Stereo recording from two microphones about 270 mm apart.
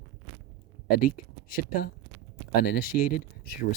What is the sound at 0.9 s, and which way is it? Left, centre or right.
Speech, left.